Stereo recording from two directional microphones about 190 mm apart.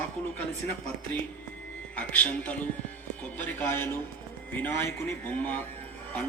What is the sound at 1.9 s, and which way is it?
A man's voice, 10° left (ahead or behind).